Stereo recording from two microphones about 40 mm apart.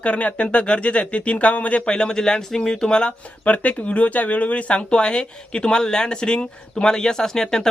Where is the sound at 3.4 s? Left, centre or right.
Left.